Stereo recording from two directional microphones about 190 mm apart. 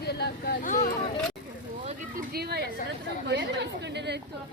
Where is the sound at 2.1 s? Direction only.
55° right (ahead or behind).